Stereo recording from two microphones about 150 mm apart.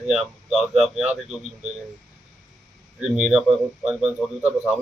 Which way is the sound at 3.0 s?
5° right (ahead or behind).